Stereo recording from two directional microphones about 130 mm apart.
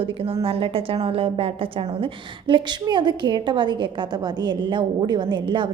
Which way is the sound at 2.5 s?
40° right (ahead or behind).